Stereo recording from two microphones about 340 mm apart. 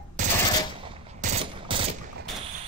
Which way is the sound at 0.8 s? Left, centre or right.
Centre.